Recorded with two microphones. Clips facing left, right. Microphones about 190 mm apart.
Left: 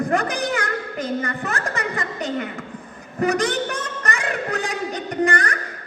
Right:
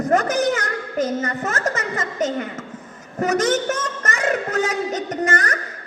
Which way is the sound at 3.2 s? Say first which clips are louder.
Right 2 dB; 40° right (ahead or behind).